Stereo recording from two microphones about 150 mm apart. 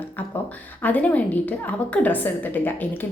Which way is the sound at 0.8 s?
10° left (ahead or behind).